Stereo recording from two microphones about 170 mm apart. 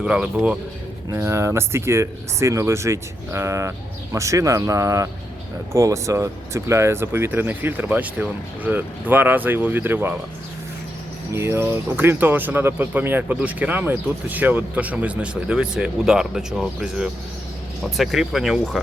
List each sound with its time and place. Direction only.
0.0 s speech: 5° right (ahead or behind)
11.3 s speech: 15° right (ahead or behind)